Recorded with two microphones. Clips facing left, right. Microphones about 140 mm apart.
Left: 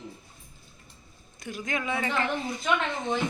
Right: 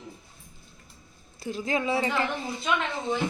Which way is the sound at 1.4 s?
30° right (ahead or behind).